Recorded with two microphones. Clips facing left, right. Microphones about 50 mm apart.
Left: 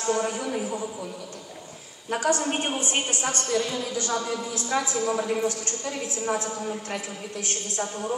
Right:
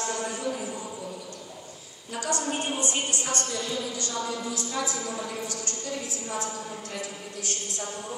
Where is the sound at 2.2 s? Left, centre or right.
Left.